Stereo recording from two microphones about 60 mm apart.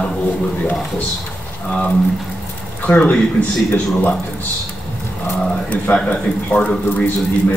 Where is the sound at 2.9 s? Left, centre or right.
Left.